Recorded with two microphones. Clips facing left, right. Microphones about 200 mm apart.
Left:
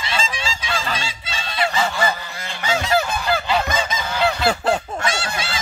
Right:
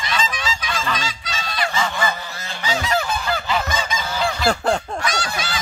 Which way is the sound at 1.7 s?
35° left (ahead or behind).